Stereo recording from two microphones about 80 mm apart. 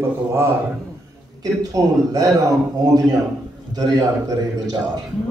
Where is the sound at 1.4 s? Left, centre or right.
Right.